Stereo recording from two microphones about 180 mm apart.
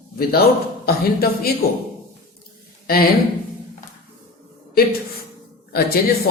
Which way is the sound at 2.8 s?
55° left (ahead or behind).